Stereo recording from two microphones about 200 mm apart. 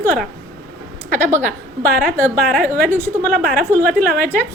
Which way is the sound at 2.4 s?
10° left (ahead or behind).